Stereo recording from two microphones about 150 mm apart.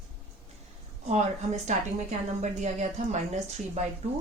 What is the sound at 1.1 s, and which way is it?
A woman's voice, 50° right (ahead or behind).